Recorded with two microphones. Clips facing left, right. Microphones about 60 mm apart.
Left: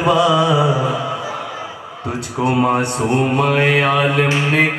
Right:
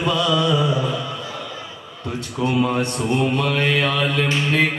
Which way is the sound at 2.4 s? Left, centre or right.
Left.